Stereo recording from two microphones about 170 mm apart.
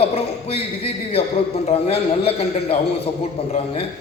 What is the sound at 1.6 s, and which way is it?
A man's voice, 35° left (ahead or behind).